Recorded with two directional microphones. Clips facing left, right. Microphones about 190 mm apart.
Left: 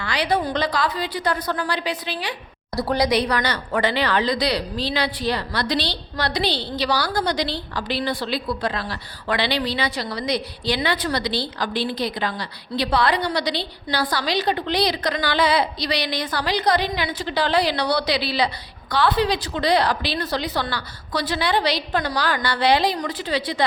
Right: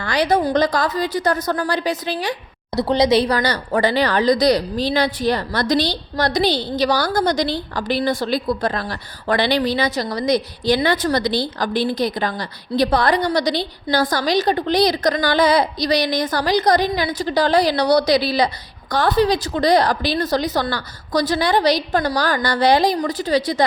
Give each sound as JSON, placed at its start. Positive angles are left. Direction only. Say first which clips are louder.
{"t": 0.0, "sound": "speech", "louder": "right 5 dB", "side_deg": -45}
{"t": 2.7, "sound": "speech", "louder": "right 5 dB", "side_deg": -20}